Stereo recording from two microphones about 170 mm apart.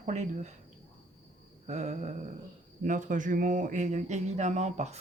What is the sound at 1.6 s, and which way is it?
Speech, 40° right (ahead or behind).